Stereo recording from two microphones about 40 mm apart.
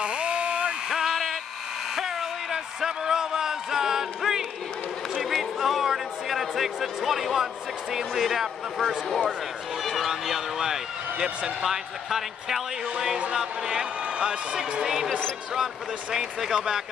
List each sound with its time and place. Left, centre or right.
0.0 s a sound: right
0.8 s a sound: centre
7.9 s speech: centre
10.6 s speech: centre
13.3 s speech: centre
15.5 s speech: centre